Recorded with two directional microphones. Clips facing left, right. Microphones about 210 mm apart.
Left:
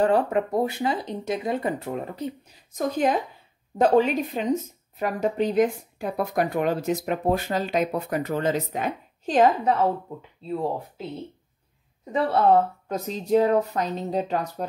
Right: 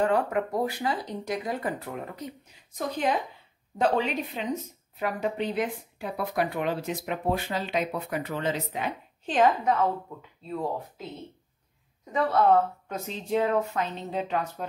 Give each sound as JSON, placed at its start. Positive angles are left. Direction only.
{"t": 0.0, "sound": "speech", "side_deg": 30}
{"t": 2.8, "sound": "speech", "side_deg": 45}
{"t": 12.1, "sound": "speech", "side_deg": 30}